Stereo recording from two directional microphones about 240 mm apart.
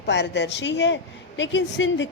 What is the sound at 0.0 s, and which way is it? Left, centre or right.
A woman's voice, left.